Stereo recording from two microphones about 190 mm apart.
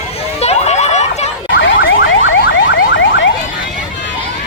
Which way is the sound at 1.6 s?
75° left (ahead or behind).